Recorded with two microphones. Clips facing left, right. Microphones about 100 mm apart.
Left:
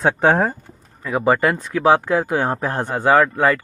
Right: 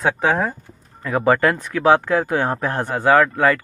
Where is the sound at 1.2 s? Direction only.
20° left (ahead or behind).